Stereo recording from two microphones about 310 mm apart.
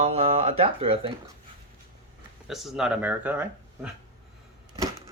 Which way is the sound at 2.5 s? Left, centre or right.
Centre.